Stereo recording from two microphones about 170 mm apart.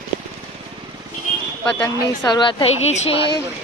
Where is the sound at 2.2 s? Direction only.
25° left (ahead or behind).